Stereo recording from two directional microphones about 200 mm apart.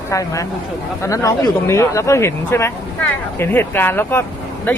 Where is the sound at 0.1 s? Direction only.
15° left (ahead or behind).